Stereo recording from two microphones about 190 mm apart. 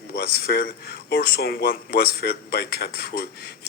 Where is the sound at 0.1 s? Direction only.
50° left (ahead or behind).